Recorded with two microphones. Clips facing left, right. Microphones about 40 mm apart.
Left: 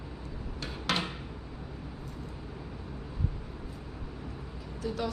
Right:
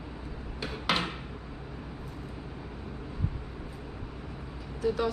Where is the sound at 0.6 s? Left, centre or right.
Centre.